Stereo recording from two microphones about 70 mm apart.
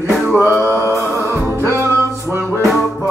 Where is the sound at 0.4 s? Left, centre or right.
Left.